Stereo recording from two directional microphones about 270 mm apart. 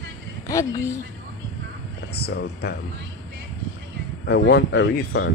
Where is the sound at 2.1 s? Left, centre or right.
Left.